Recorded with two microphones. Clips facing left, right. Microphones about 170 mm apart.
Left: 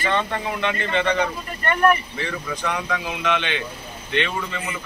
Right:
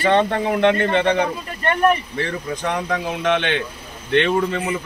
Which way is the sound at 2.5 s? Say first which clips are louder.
Right 3 dB; 45° right (ahead or behind).